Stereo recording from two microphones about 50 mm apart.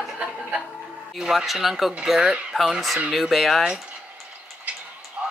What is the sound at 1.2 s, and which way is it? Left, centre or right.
Speech, centre.